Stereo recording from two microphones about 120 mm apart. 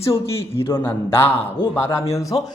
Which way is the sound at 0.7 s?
20° left (ahead or behind).